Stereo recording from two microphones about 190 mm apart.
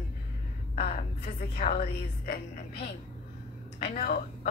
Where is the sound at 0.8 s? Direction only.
35° left (ahead or behind).